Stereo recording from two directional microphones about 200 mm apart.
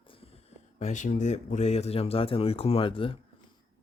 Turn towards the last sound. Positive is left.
turn(degrees=25)  # may be behind; listen again after turning